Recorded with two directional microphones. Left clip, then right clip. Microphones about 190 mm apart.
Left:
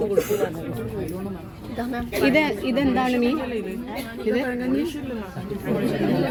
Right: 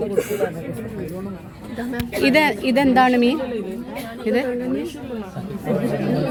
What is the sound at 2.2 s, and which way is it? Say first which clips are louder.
A woman's voice: right 4 dB; 20° right (ahead or behind).